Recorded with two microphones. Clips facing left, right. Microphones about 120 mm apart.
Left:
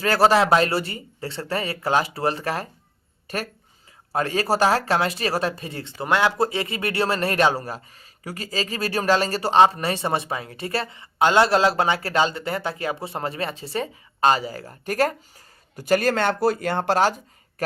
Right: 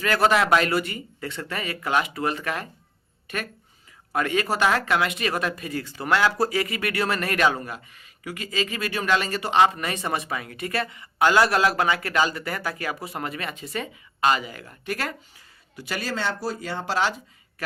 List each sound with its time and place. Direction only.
0.0 s speech: 35° left (ahead or behind)